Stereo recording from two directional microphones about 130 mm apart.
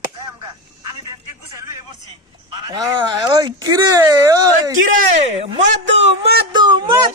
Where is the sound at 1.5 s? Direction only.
25° right (ahead or behind).